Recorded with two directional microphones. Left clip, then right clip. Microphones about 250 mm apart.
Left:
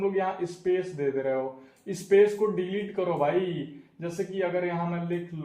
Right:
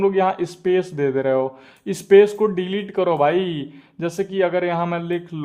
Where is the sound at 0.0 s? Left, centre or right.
Right.